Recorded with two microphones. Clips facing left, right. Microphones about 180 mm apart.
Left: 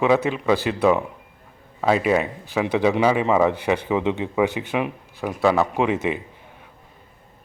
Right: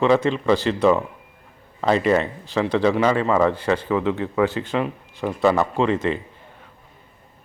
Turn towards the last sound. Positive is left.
turn(degrees=10)  # may be behind; listen again after turning